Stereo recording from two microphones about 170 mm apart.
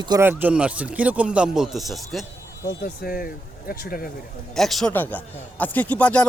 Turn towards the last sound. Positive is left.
turn(degrees=10)  # may be behind; listen again after turning